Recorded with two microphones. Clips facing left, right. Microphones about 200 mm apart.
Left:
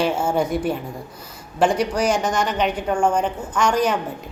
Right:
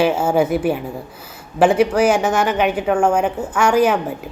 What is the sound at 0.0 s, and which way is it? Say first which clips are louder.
A woman's voice: right 4 dB; 5° right (ahead or behind).